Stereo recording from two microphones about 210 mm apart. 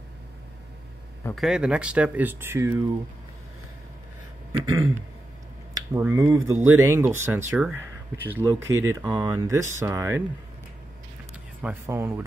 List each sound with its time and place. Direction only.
1.3 s speech: centre (ahead or behind)
4.5 s a sound: 15° right (ahead or behind)
5.8 s speech: 15° right (ahead or behind)
11.6 s speech: 10° right (ahead or behind)